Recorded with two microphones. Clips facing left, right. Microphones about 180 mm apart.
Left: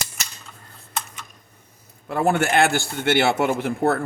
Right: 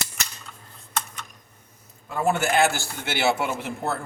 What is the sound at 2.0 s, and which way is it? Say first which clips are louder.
A man's voice: left 3 dB; 65° left (ahead or behind).